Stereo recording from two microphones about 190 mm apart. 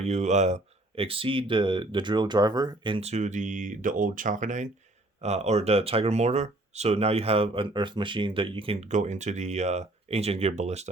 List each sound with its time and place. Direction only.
0.0 s speech: 35° right (ahead or behind)